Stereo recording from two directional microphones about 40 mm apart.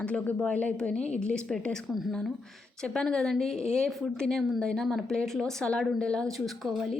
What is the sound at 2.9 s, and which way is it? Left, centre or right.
A woman's voice, centre.